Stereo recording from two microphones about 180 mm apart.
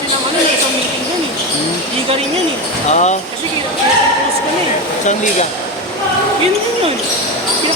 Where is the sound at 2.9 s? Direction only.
40° left (ahead or behind).